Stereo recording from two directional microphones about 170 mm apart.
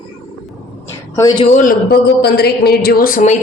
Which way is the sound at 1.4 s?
50° left (ahead or behind).